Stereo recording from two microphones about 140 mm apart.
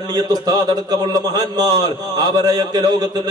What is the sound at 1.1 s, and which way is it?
A man's voice, 25° right (ahead or behind).